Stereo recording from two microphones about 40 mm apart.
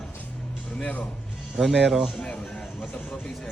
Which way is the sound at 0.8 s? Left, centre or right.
Left.